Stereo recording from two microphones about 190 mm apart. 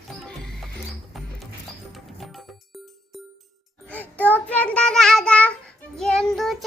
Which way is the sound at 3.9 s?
10° left (ahead or behind).